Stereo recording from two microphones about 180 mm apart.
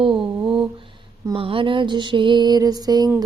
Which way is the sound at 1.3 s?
30° right (ahead or behind).